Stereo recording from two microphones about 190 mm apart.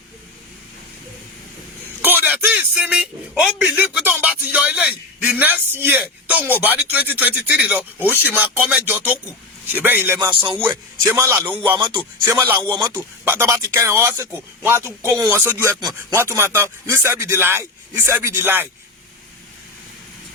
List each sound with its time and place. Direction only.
2.0 s speech: 10° right (ahead or behind)
10.2 s speech: 25° right (ahead or behind)
11.0 s speech: 15° right (ahead or behind)
11.8 s speech: 25° right (ahead or behind)
12.2 s speech: 15° right (ahead or behind)